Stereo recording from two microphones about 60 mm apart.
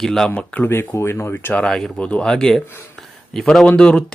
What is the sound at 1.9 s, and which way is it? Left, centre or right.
Speech, centre.